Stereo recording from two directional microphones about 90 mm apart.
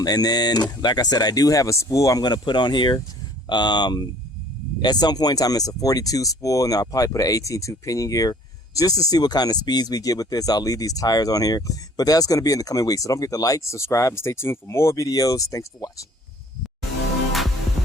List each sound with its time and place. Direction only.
0.0 s speech: 45° left (ahead or behind)